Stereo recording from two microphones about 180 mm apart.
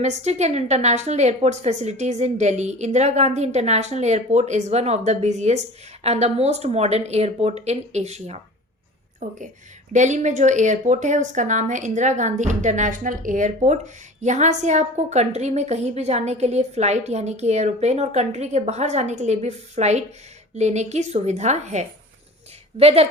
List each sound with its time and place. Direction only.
0.0 s a woman's voice: 40° right (ahead or behind)